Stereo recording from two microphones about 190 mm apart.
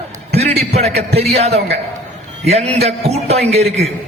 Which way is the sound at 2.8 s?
35° right (ahead or behind).